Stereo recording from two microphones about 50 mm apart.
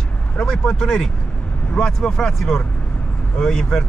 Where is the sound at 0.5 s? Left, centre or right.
Centre.